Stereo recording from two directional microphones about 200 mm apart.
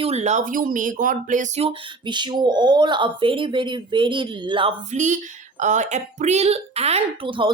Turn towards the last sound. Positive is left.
turn(degrees=-25)  # may be behind; listen again after turning